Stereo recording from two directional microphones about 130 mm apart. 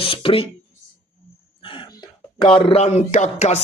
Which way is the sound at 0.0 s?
45° left (ahead or behind).